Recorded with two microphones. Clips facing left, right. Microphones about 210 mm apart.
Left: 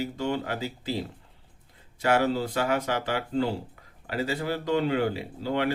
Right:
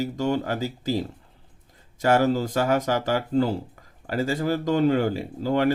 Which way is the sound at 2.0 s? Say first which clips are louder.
Right 4 dB; 40° right (ahead or behind).